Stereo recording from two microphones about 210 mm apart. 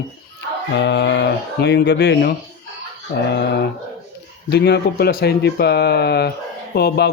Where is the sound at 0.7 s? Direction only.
55° left (ahead or behind).